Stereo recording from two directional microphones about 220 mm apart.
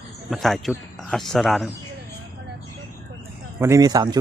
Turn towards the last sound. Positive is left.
turn(degrees=-20)  # may be behind; listen again after turning